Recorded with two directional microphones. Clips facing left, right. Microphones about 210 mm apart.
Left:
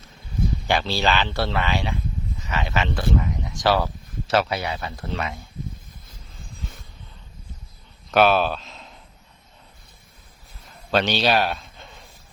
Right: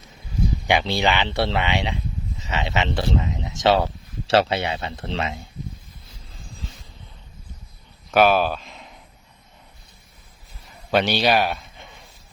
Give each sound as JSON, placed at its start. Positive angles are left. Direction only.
{"t": 0.7, "sound": "speech", "side_deg": -15}
{"t": 8.1, "sound": "speech", "side_deg": -10}
{"t": 10.9, "sound": "a man's voice", "side_deg": -10}